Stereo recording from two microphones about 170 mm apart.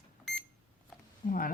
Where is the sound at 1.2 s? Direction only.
45° left (ahead or behind).